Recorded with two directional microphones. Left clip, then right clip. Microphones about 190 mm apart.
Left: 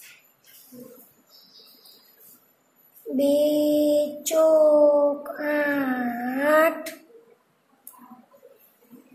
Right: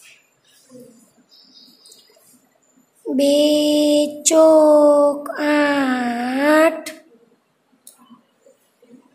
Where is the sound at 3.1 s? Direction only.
25° right (ahead or behind).